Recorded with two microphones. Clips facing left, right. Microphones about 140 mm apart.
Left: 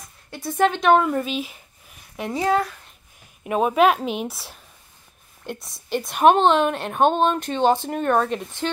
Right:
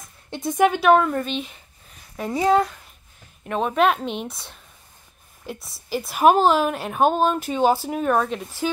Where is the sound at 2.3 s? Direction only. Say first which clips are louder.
Right 3 dB; 15° right (ahead or behind).